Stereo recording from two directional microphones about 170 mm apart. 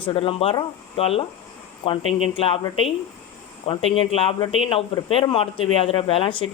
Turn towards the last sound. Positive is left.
turn(degrees=30)  # may be behind; listen again after turning